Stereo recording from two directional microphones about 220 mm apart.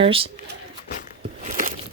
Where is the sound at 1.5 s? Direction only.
35° right (ahead or behind).